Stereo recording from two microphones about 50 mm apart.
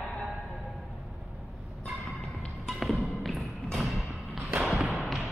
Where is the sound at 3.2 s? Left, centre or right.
Centre.